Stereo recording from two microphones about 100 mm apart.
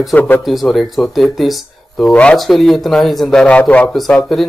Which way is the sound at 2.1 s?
10° left (ahead or behind).